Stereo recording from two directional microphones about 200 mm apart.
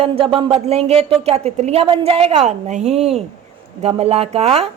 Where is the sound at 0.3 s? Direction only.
30° right (ahead or behind).